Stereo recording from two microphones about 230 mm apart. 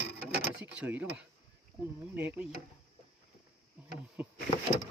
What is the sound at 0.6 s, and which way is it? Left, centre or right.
Speech, centre.